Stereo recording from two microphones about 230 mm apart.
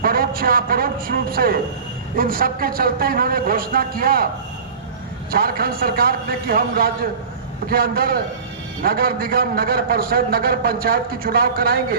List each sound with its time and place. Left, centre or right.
0.0 s a man's voice: right
5.3 s a man's voice: right